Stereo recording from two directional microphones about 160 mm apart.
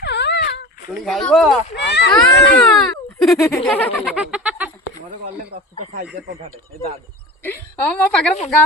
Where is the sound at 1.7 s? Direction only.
90° left.